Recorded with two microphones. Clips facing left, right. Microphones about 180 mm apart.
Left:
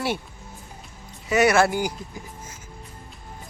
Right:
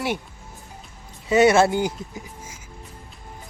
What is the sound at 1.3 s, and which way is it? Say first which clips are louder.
Speech: right 3 dB; 25° right (ahead or behind).